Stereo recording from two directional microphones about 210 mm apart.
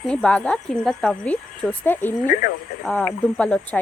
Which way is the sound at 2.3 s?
40° left (ahead or behind).